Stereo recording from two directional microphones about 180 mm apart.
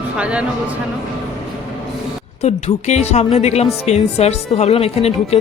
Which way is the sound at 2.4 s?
35° left (ahead or behind).